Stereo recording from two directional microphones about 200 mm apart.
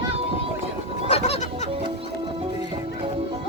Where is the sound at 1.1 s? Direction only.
30° left (ahead or behind).